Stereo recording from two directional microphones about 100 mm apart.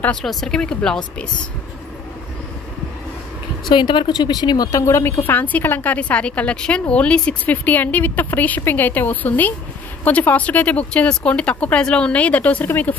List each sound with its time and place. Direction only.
0.1 s speech: 5° left (ahead or behind)
3.7 s speech: 50° left (ahead or behind); by 12.9 s 20° left (ahead or behind)